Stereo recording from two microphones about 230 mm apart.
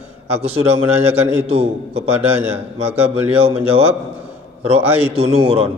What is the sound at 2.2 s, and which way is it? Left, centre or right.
Speech, centre.